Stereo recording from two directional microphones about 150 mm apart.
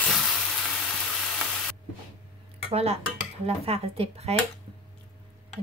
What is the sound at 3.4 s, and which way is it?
Speech, 40° right (ahead or behind).